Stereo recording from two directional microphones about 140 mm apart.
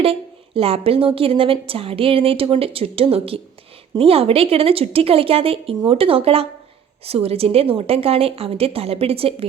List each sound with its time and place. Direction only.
0.0 s a woman's voice: 45° right (ahead or behind)